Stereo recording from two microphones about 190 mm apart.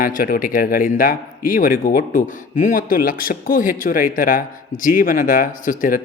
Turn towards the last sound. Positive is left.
turn(degrees=45)  # may be behind; listen again after turning